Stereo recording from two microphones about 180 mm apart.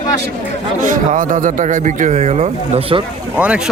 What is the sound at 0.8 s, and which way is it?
Speech, 50° right (ahead or behind).